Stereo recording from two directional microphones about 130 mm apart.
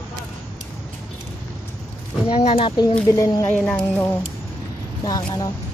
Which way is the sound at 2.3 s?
50° left (ahead or behind).